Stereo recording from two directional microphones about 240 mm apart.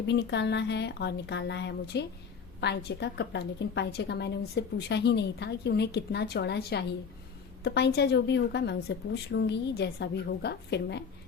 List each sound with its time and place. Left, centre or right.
0.1 s a woman's voice: left